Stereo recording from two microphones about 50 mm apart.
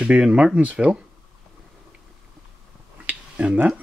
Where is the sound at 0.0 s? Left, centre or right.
Right.